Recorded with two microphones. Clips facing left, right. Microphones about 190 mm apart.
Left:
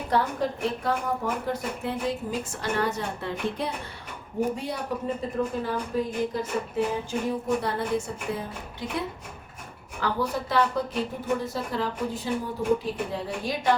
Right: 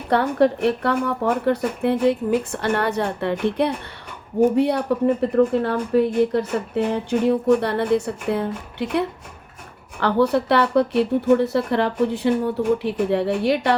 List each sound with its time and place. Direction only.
0.1 s speech: 70° right (ahead or behind)